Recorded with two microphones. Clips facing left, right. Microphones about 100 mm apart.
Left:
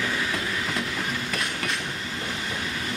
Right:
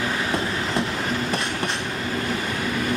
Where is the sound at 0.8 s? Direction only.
45° right (ahead or behind).